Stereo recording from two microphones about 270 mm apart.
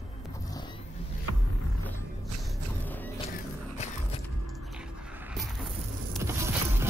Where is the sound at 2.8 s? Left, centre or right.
Centre.